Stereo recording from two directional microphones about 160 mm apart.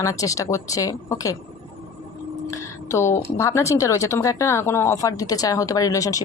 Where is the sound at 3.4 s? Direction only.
20° left (ahead or behind).